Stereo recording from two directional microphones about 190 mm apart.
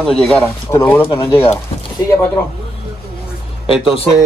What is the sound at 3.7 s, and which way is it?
Speech, 5° right (ahead or behind).